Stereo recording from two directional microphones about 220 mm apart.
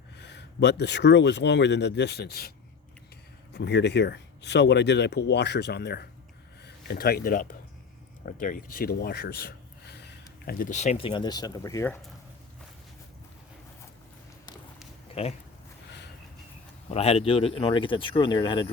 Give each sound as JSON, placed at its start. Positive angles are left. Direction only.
{"t": 0.2, "sound": "speech", "side_deg": 50}
{"t": 3.5, "sound": "speech", "side_deg": 50}
{"t": 15.1, "sound": "speech", "side_deg": 25}
{"t": 16.9, "sound": "speech", "side_deg": 30}